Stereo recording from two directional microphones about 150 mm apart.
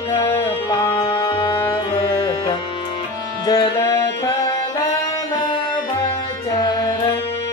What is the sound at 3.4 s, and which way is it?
Music, 25° left (ahead or behind).